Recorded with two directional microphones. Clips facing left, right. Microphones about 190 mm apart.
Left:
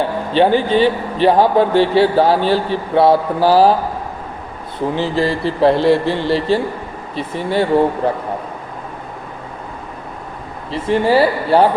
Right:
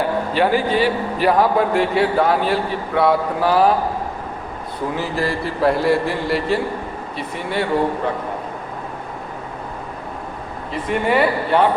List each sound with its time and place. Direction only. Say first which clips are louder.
0.3 s a man's voice: left 5 dB; 30° left (ahead or behind)
4.9 s a man's voice: left 5 dB; 30° left (ahead or behind)
10.7 s a man's voice: left 5 dB; 30° left (ahead or behind)